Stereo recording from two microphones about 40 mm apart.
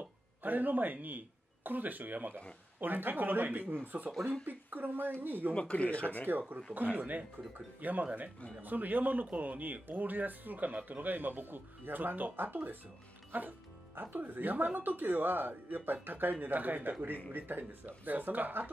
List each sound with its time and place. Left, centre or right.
0.4 s speech: right
5.5 s speech: left
6.2 s speech: right
7.0 s speech: right